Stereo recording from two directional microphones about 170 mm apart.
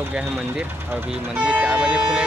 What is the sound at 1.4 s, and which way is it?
Speech, 5° right (ahead or behind).